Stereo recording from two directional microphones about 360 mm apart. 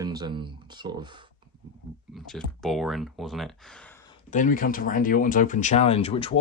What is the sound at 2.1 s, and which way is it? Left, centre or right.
Speech, centre.